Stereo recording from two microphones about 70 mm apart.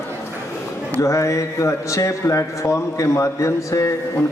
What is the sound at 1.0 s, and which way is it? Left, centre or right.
A man's voice, left.